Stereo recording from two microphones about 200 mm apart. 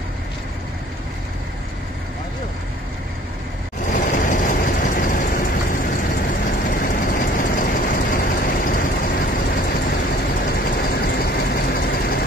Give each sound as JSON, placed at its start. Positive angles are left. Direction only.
{"t": 3.8, "sound": "vehicle", "side_deg": 40}